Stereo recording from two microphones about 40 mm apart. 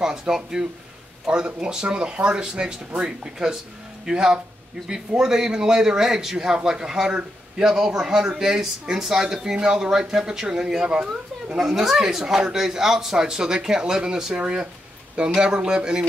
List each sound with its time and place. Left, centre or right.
0.0 s speech: centre